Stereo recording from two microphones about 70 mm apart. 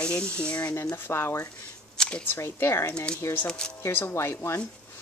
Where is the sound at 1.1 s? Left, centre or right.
Left.